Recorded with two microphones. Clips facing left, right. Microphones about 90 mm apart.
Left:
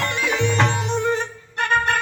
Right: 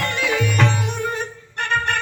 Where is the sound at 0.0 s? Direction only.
20° left (ahead or behind).